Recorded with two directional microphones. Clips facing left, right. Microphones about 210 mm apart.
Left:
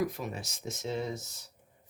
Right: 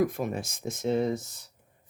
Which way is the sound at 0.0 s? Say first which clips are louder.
Right 6 dB; 50° right (ahead or behind).